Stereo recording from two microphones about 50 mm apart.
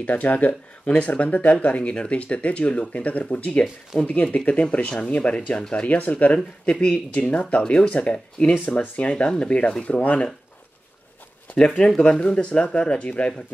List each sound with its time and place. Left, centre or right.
0.0 s speech: left
11.5 s speech: centre